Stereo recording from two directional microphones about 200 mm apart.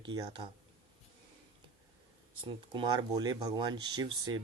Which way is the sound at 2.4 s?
25° right (ahead or behind).